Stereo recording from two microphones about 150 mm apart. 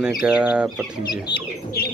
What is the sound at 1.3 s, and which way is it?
Bird, 30° left (ahead or behind).